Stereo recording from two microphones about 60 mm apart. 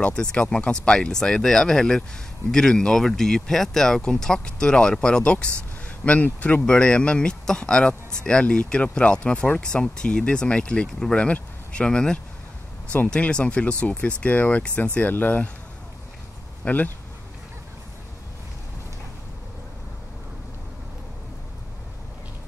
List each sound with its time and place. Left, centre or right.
0.0 s speech: centre
16.6 s speech: left